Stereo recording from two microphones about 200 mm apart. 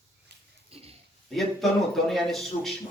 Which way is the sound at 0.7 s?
30° right (ahead or behind).